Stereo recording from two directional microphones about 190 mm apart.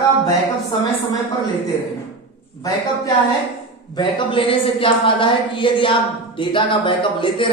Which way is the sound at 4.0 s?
25° left (ahead or behind).